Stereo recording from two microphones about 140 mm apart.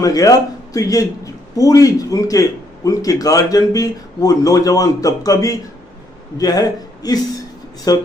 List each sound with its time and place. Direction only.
0.0 s a man's voice: 25° left (ahead or behind)